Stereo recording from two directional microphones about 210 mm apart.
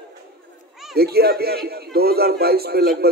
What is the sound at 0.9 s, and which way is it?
A man's voice, 50° right (ahead or behind).